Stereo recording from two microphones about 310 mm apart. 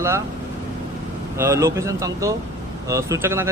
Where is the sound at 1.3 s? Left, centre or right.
Centre.